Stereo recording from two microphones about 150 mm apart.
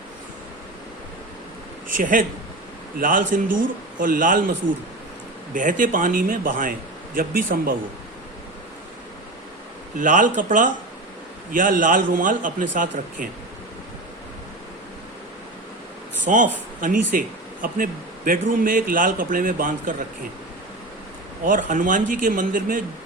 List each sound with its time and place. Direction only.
2.0 s speech: 65° right (ahead or behind)
5.5 s speech: 60° right (ahead or behind)
10.0 s speech: 60° right (ahead or behind)
16.2 s speech: 60° right (ahead or behind)
21.4 s speech: 65° right (ahead or behind)